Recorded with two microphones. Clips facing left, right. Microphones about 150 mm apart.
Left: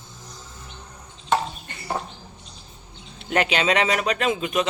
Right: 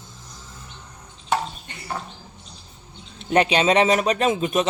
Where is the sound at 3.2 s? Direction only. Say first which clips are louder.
Right 4 dB; 25° right (ahead or behind).